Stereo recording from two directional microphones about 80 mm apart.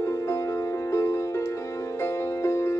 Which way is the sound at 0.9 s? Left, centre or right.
Left.